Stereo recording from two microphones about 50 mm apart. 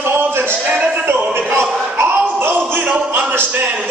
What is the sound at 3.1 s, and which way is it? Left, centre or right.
Music, right.